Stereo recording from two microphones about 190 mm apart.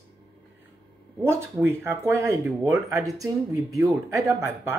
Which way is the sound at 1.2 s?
15° right (ahead or behind).